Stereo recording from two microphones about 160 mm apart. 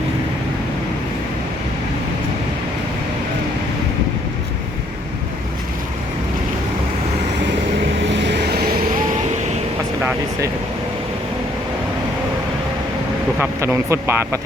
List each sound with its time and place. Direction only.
8.1 s vehicle: 90° right
13.4 s speech: 15° right (ahead or behind)